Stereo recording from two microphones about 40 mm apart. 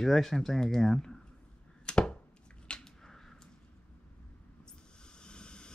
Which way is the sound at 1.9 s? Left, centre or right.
Left.